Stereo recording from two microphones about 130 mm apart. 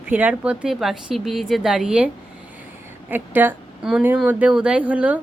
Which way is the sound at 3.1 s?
15° right (ahead or behind).